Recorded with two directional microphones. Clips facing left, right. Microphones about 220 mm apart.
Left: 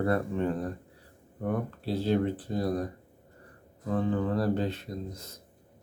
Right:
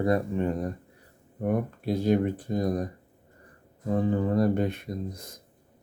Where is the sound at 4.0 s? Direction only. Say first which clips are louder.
Right 4 dB; 10° right (ahead or behind).